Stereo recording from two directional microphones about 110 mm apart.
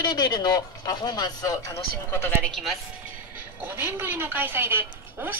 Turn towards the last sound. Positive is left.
turn(degrees=-20)  # may be behind; listen again after turning